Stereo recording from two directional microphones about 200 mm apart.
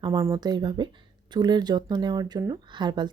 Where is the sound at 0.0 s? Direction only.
25° right (ahead or behind).